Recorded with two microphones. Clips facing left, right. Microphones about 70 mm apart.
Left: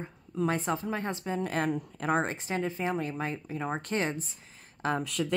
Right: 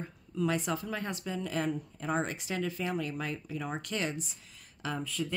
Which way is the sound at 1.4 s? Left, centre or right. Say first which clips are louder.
Left 3 dB; left.